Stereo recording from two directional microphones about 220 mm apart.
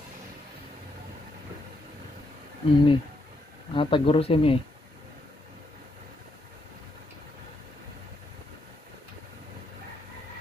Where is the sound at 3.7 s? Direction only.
25° left (ahead or behind).